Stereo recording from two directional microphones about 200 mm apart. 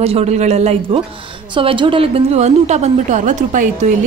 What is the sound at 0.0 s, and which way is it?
A woman's voice, 30° right (ahead or behind).